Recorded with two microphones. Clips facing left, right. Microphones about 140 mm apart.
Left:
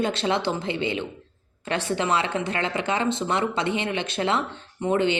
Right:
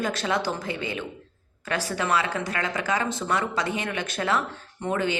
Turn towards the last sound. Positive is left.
turn(degrees=25)  # may be behind; listen again after turning